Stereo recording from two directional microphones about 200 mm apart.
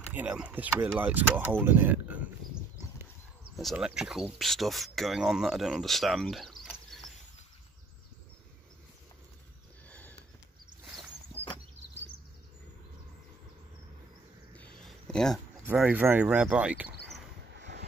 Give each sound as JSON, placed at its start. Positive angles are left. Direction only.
{"t": 0.1, "sound": "speech", "side_deg": -5}
{"t": 3.5, "sound": "speech", "side_deg": 0}
{"t": 9.8, "sound": "sniff", "side_deg": 5}
{"t": 14.6, "sound": "a sound", "side_deg": 5}
{"t": 15.6, "sound": "speech", "side_deg": -5}
{"t": 17.6, "sound": "a sound", "side_deg": -60}